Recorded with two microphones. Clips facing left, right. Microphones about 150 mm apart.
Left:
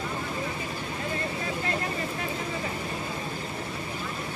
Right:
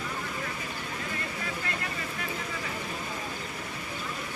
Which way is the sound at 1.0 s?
30° left (ahead or behind).